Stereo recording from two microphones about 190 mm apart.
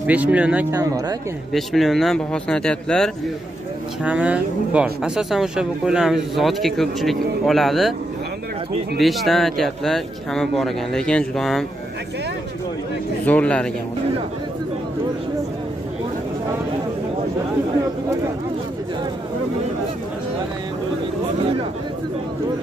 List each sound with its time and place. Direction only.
0.0 s speech: 5° right (ahead or behind)
0.7 s speech: 20° right (ahead or behind)
1.5 s speech: centre (ahead or behind)
4.0 s speech: 5° right (ahead or behind)
9.0 s speech: centre (ahead or behind)
13.2 s speech: 10° left (ahead or behind)